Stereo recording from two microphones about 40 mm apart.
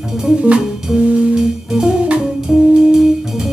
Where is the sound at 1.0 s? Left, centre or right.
Right.